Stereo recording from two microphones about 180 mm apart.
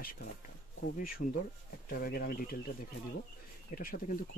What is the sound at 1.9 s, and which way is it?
Speech, 55° left (ahead or behind).